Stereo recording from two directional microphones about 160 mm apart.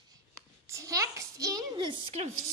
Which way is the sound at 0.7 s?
20° right (ahead or behind).